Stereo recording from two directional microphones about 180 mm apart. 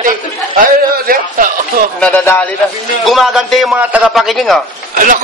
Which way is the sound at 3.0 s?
Centre (ahead or behind).